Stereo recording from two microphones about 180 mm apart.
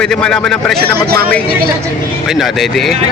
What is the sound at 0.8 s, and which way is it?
Speech, 60° right (ahead or behind).